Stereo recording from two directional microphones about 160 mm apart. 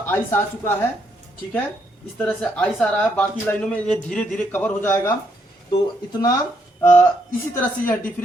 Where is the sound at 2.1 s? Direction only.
5° left (ahead or behind).